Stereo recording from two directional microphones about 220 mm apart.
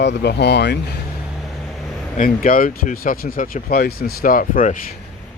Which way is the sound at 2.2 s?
40° left (ahead or behind).